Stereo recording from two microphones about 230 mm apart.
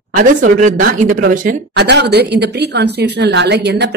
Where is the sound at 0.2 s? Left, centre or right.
Right.